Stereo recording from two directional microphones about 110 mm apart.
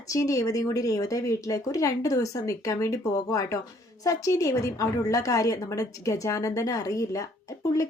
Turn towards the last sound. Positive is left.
turn(degrees=30)  # may be behind; listen again after turning